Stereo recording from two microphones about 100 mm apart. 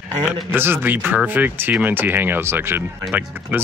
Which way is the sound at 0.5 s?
20° right (ahead or behind).